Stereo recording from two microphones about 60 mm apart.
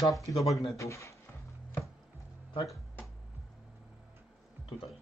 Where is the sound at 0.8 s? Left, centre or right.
Left.